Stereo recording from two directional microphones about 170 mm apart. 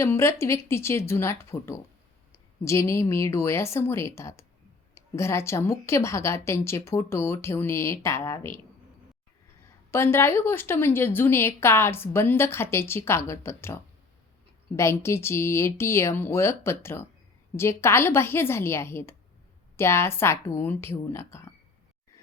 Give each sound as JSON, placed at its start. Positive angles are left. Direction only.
{"t": 0.0, "sound": "a woman's voice", "side_deg": 15}
{"t": 9.6, "sound": "a woman's voice", "side_deg": 15}